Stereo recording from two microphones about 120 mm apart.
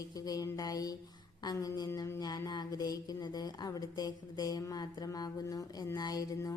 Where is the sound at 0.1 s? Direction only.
30° left (ahead or behind).